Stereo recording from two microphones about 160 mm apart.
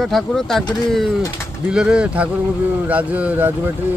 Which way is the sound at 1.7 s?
5° right (ahead or behind).